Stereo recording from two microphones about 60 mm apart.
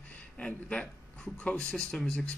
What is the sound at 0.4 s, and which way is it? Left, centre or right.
A man's voice, centre.